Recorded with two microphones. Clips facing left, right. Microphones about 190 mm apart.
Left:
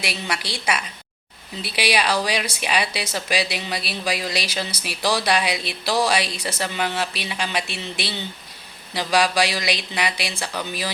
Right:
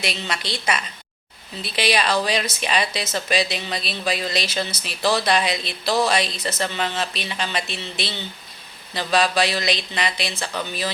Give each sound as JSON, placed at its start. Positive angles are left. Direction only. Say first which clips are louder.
{"t": 0.0, "sound": "speech", "louder": "even", "side_deg": 10}